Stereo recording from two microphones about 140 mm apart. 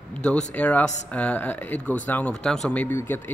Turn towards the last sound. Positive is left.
turn(degrees=15)  # may be behind; listen again after turning